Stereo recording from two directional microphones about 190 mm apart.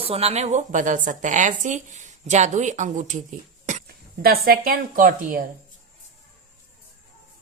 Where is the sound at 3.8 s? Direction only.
50° right (ahead or behind).